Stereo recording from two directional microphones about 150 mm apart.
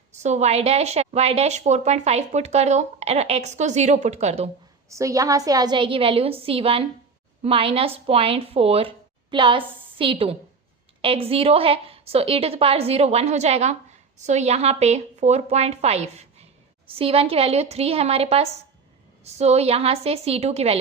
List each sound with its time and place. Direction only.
0.1 s a woman's voice: 50° right (ahead or behind)
4.9 s a woman's voice: 20° right (ahead or behind); by 20.7 s 45° right (ahead or behind)